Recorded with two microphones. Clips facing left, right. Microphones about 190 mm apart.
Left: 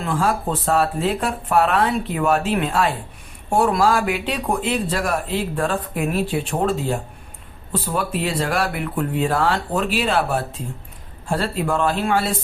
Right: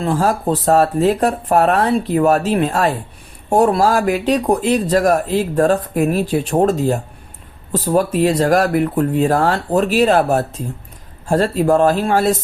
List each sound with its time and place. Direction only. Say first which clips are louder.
0.0 s speech: right 5 dB; 40° right (ahead or behind)